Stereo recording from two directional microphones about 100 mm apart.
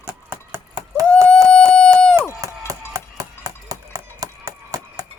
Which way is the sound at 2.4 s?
35° right (ahead or behind).